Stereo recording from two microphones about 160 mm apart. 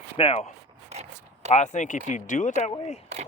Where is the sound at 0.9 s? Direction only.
40° right (ahead or behind).